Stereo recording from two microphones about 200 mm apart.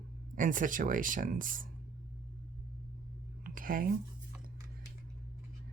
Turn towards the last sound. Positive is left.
turn(degrees=-45)  # may be behind; listen again after turning